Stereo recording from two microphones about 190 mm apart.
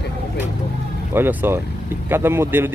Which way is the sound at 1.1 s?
10° right (ahead or behind).